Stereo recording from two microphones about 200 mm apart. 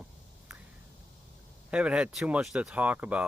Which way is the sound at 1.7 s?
5° right (ahead or behind).